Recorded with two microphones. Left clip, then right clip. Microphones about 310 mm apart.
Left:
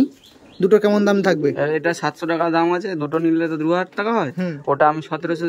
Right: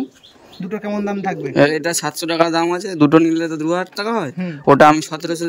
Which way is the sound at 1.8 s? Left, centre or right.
Centre.